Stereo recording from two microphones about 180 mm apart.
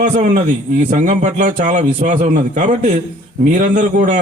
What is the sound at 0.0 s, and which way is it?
A man's voice, 45° right (ahead or behind).